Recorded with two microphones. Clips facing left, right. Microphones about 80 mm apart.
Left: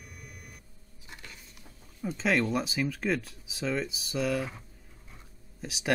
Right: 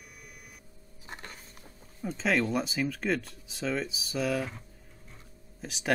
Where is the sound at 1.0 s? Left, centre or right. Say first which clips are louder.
Right 4 dB; right.